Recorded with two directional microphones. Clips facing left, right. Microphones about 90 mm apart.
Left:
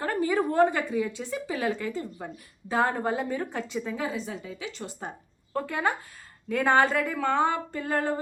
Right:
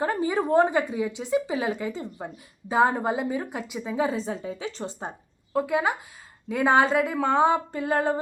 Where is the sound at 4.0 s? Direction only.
30° right (ahead or behind).